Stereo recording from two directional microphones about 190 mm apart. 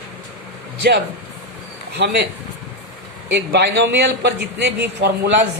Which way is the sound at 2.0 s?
65° right (ahead or behind).